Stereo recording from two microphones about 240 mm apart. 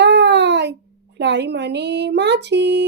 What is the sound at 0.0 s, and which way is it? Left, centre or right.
A child's voice, right.